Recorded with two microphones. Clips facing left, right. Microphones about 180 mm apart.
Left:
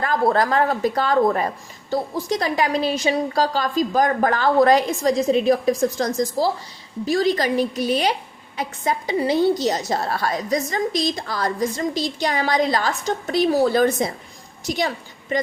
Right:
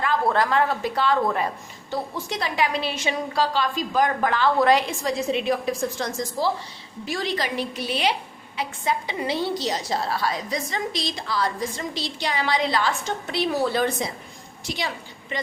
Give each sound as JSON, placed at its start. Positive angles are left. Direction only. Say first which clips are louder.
{"t": 0.0, "sound": "a woman's voice", "louder": "left 3 dB", "side_deg": 40}